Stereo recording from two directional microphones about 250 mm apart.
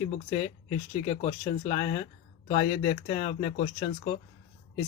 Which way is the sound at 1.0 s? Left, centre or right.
Left.